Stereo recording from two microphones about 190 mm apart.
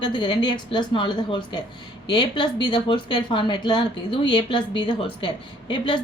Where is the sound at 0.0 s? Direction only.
25° left (ahead or behind).